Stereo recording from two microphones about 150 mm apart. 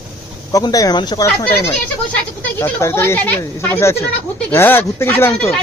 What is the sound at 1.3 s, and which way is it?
Speech, 15° left (ahead or behind).